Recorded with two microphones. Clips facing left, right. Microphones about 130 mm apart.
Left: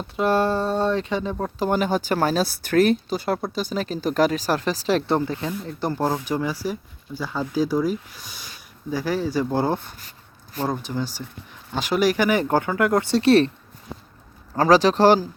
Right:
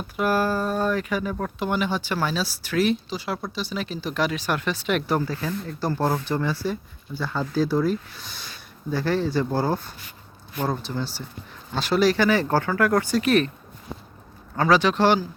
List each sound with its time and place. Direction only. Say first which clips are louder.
0.0 s speech: left 2 dB; 25° left (ahead or behind)
1.6 s speech: left 4 dB; 40° left (ahead or behind)
14.5 s speech: left 3 dB; 35° left (ahead or behind)